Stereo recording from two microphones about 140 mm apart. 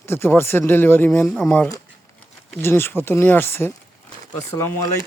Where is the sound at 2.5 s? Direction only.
15° left (ahead or behind).